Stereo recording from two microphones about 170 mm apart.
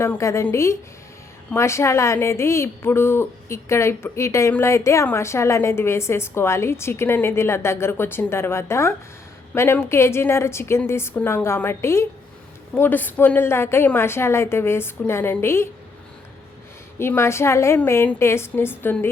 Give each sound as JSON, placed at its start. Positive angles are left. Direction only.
{"t": 0.0, "sound": "a woman's voice", "side_deg": 15}
{"t": 17.0, "sound": "a woman's voice", "side_deg": 15}